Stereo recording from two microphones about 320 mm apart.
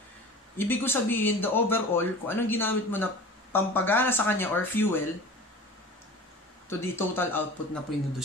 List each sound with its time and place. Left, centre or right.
0.6 s speech: centre
6.8 s speech: centre